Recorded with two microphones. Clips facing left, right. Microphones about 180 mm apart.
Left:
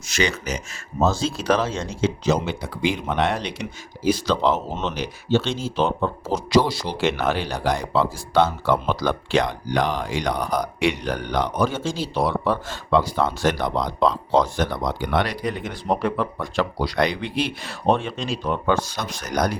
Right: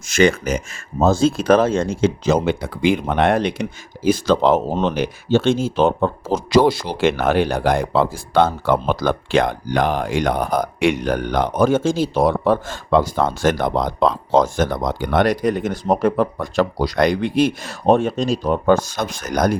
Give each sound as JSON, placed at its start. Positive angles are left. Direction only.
{"t": 0.1, "sound": "speech", "side_deg": -50}